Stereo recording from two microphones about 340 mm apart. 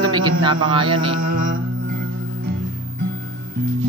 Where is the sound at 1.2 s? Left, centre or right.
Right.